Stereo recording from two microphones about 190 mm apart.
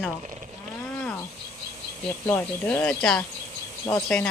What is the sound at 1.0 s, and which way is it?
Cricket, 10° left (ahead or behind).